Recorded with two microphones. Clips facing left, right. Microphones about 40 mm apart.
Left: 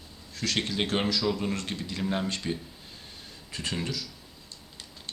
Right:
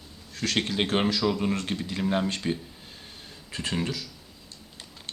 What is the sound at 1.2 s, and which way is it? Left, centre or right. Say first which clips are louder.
Speech: right 3 dB; centre.